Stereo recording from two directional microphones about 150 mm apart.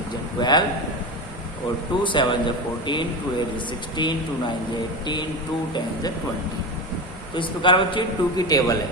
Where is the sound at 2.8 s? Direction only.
30° left (ahead or behind).